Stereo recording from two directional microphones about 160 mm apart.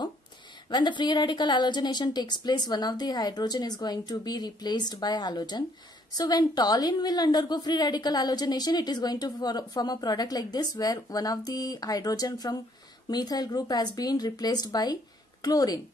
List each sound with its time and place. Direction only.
0.7 s a woman's voice: 30° left (ahead or behind)